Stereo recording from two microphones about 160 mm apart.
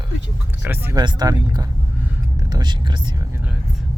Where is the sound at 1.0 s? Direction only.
25° right (ahead or behind).